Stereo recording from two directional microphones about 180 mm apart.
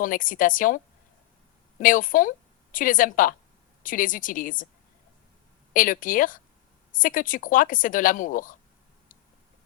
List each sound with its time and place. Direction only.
0.0 s speech: 50° left (ahead or behind)
1.8 s speech: 50° left (ahead or behind)
5.7 s speech: 50° left (ahead or behind)